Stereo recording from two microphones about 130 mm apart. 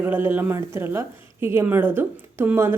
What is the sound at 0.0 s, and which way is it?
A woman's voice, 15° right (ahead or behind).